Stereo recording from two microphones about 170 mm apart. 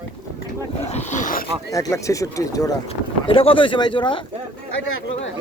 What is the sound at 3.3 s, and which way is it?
Speech, 30° left (ahead or behind).